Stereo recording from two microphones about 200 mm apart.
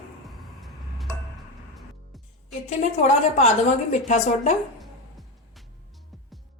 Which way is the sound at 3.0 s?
35° left (ahead or behind).